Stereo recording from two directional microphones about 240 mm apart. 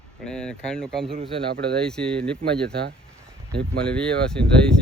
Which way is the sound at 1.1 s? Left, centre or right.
Right.